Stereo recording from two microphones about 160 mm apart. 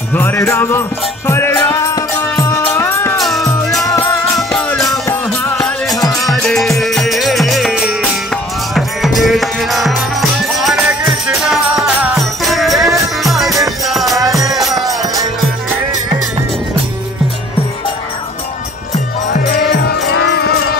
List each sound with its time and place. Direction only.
0.1 s music: 15° left (ahead or behind)
3.2 s music: centre (ahead or behind)
14.8 s music: 20° right (ahead or behind)
19.7 s music: 90° left